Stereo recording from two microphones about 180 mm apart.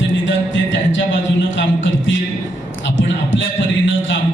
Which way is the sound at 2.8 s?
90° left.